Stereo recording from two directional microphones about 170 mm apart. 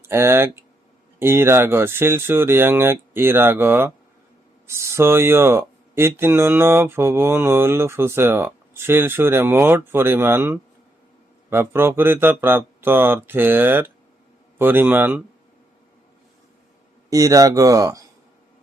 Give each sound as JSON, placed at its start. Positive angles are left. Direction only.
{"t": 0.0, "sound": "speech", "side_deg": -15}
{"t": 17.1, "sound": "speech", "side_deg": -20}